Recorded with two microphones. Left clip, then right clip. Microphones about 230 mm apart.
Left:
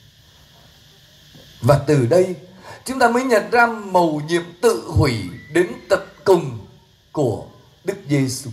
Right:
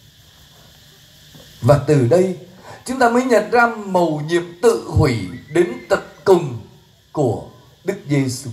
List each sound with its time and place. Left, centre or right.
1.6 s a man's voice: left
7.1 s a sound: left
7.8 s a man's voice: left